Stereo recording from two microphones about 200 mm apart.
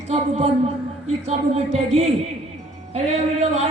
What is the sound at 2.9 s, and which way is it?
Speech, 35° right (ahead or behind).